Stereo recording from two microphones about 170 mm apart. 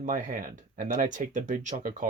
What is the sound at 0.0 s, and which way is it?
Speech, 50° right (ahead or behind).